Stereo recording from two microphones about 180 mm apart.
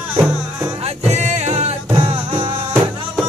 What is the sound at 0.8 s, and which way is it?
Music, 40° right (ahead or behind).